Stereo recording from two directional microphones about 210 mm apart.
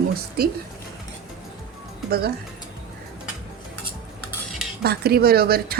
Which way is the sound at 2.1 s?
50° right (ahead or behind).